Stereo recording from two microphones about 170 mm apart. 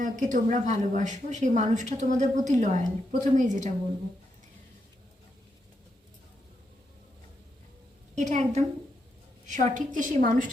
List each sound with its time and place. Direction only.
0.0 s a woman's voice: 50° right (ahead or behind)
8.1 s a woman's voice: 45° right (ahead or behind)